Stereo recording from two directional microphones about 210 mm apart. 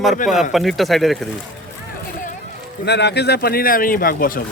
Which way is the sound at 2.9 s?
55° left (ahead or behind).